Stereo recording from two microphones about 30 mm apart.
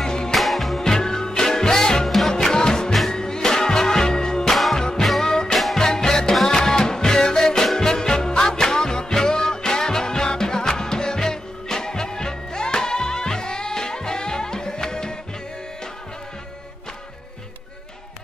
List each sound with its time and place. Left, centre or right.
0.0 s music: left
0.3 s music: centre
0.7 s music: centre
4.5 s music: centre
4.7 s music: left
5.5 s music: centre
5.8 s music: centre